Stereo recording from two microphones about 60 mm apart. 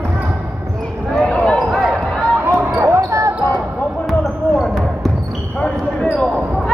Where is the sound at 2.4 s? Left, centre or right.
Right.